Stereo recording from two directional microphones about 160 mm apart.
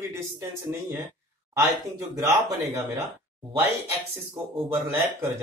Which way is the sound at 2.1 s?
20° right (ahead or behind).